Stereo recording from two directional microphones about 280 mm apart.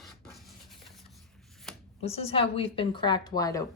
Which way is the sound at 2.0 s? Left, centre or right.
Left.